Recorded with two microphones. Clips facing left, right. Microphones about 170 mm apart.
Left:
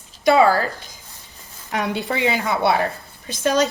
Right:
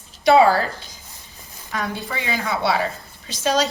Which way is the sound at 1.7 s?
70° left (ahead or behind).